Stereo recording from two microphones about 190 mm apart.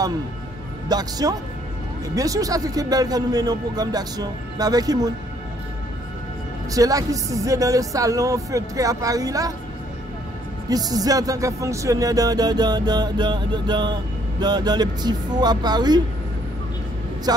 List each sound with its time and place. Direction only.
0.8 s music: 20° right (ahead or behind)
6.7 s speech: 20° right (ahead or behind)
10.7 s music: 20° right (ahead or behind)